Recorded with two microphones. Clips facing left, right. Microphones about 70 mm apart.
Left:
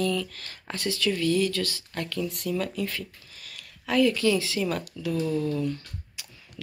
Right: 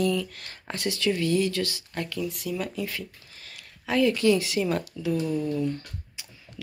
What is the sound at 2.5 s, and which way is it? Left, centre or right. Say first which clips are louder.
Speech: left 2 dB; centre.